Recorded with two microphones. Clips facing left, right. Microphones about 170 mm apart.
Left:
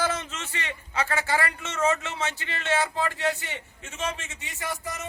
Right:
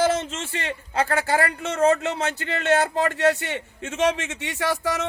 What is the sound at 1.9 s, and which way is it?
A man's voice, 60° right (ahead or behind).